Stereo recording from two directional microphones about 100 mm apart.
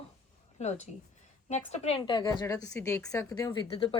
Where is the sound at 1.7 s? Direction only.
90° left.